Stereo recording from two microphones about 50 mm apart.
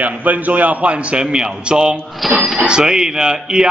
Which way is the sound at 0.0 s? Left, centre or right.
Right.